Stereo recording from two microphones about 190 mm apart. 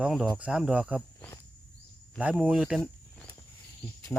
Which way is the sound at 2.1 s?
10° right (ahead or behind).